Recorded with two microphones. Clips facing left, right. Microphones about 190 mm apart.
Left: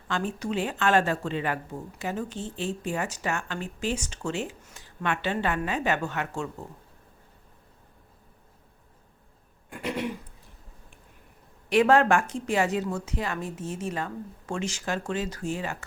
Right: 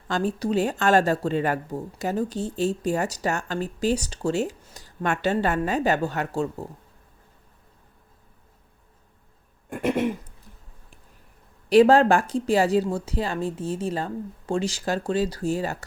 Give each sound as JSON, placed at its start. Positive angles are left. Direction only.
{"t": 0.1, "sound": "a woman's voice", "side_deg": -35}
{"t": 9.6, "sound": "throat clearing", "side_deg": -50}
{"t": 11.7, "sound": "a woman's voice", "side_deg": -35}